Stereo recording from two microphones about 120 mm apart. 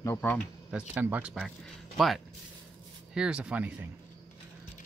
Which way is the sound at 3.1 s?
10° right (ahead or behind).